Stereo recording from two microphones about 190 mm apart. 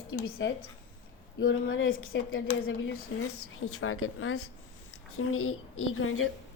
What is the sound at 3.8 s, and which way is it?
A woman's voice, 90° left.